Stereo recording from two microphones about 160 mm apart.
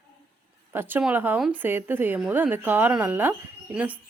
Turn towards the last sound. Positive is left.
turn(degrees=-10)  # may be behind; listen again after turning